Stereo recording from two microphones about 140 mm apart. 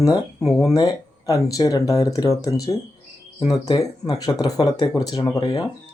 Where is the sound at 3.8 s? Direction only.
25° left (ahead or behind).